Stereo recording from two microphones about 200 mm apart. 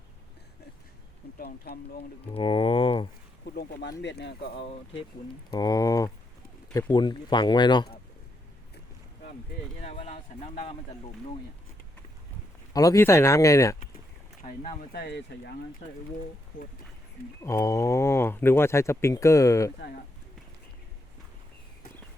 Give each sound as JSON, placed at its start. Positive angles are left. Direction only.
{"t": 1.4, "sound": "speech", "side_deg": 50}
{"t": 2.2, "sound": "speech", "side_deg": 25}
{"t": 3.4, "sound": "speech", "side_deg": 50}
{"t": 4.5, "sound": "speech", "side_deg": 25}
{"t": 9.8, "sound": "speech", "side_deg": 35}
{"t": 12.7, "sound": "speech", "side_deg": 15}
{"t": 14.4, "sound": "speech", "side_deg": 40}
{"t": 15.0, "sound": "speech", "side_deg": 55}
{"t": 17.4, "sound": "speech", "side_deg": 15}